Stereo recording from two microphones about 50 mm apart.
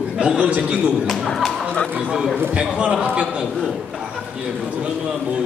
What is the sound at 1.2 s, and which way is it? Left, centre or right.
Speech, centre.